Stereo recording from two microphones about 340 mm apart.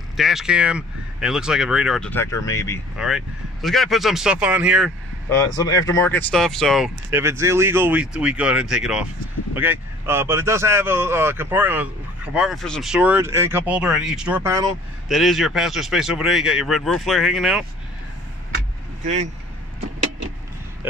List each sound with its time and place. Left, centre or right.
0.2 s speech: centre
3.0 s speech: centre
19.0 s speech: right